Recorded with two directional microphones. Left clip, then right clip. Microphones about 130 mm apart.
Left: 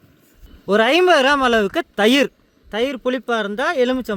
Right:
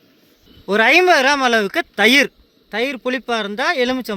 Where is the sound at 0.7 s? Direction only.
35° left (ahead or behind).